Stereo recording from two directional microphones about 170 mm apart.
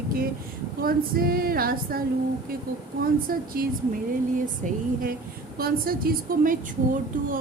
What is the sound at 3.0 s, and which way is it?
Speech, 60° right (ahead or behind).